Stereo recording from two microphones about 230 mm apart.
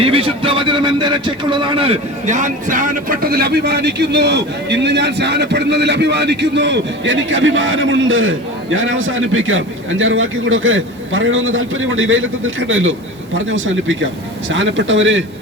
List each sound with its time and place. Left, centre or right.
0.0 s a man's voice: right